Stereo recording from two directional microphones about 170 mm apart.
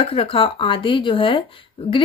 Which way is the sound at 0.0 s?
35° left (ahead or behind).